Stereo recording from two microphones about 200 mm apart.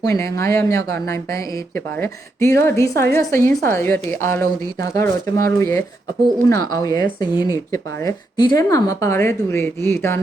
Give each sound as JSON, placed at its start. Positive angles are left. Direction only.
{"t": 0.0, "sound": "speech", "side_deg": 15}